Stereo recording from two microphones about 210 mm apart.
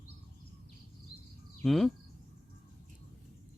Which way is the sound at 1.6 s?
Centre (ahead or behind).